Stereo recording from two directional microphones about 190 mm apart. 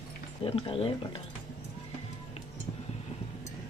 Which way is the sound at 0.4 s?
30° left (ahead or behind).